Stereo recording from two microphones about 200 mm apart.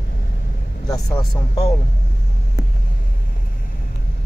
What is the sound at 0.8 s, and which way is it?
Speech, 20° left (ahead or behind).